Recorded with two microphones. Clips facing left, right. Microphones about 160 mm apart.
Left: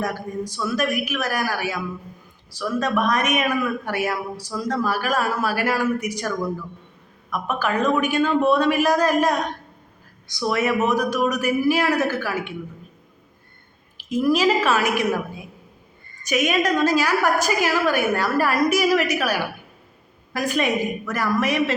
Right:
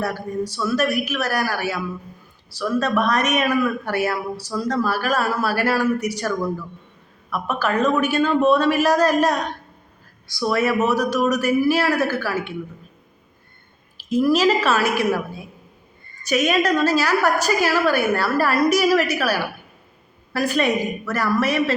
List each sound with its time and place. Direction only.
0.0 s a man's voice: 15° left (ahead or behind)
14.1 s a man's voice: 15° left (ahead or behind)